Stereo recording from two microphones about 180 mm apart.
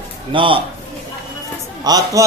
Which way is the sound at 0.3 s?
30° right (ahead or behind).